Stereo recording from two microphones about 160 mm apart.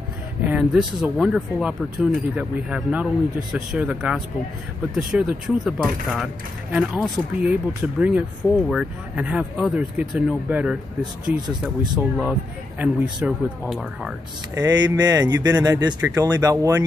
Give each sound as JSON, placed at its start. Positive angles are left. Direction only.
{"t": 0.4, "sound": "speech", "side_deg": -10}
{"t": 14.5, "sound": "speech", "side_deg": -25}